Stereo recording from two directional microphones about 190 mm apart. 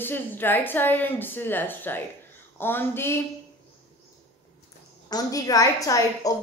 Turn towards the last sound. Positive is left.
turn(degrees=20)  # may be behind; listen again after turning